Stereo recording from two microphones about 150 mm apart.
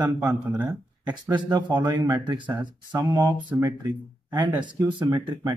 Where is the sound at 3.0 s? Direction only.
20° right (ahead or behind).